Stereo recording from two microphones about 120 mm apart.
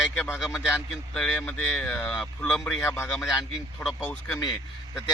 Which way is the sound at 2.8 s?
20° left (ahead or behind).